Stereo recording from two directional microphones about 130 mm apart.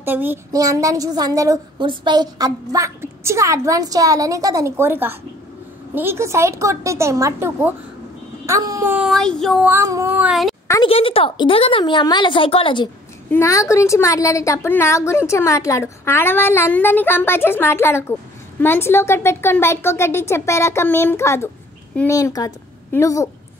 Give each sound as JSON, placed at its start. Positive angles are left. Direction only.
{"t": 0.0, "sound": "a sound", "side_deg": -15}
{"t": 0.5, "sound": "a woman's voice", "side_deg": -25}
{"t": 8.9, "sound": "female singing", "side_deg": -5}
{"t": 9.6, "sound": "a woman's voice", "side_deg": -15}
{"t": 10.1, "sound": "female singing", "side_deg": -5}
{"t": 10.8, "sound": "a woman's voice", "side_deg": 45}
{"t": 13.3, "sound": "a woman's voice", "side_deg": 20}